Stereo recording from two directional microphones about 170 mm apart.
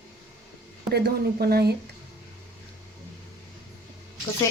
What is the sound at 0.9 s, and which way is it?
Speech, 65° right (ahead or behind).